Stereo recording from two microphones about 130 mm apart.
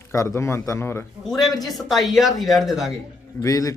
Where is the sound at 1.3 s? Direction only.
Centre (ahead or behind).